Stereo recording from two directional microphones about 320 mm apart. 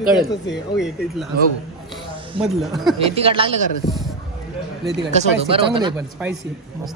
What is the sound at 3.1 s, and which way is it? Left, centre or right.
Speech, centre.